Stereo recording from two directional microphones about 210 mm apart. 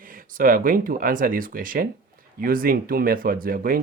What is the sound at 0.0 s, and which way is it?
Speech, 40° right (ahead or behind).